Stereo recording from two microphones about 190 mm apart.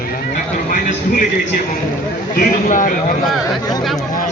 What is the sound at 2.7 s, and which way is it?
Speech, 45° left (ahead or behind).